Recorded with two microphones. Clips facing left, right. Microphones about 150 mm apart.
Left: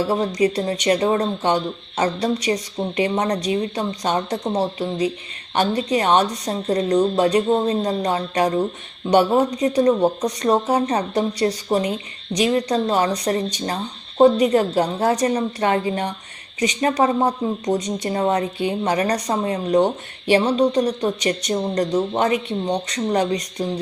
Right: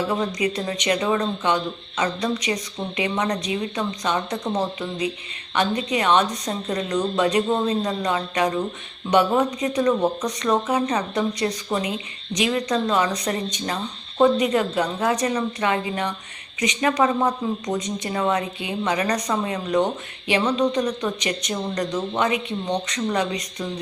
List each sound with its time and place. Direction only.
0.1 s speech: 35° left (ahead or behind)